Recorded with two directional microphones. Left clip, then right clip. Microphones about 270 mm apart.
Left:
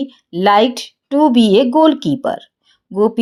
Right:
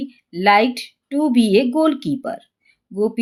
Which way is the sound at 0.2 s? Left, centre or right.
Centre.